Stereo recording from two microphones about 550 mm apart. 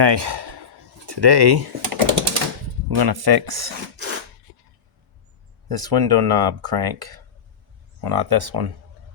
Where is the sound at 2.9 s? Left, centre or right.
Right.